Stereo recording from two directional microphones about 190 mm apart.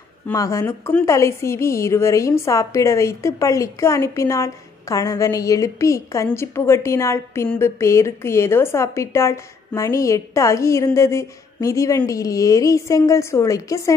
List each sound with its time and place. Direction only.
0.3 s a woman's voice: 15° left (ahead or behind)